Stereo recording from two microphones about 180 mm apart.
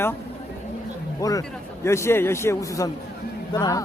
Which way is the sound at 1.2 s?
20° left (ahead or behind).